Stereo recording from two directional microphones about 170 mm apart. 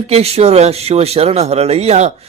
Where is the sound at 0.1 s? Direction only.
35° right (ahead or behind).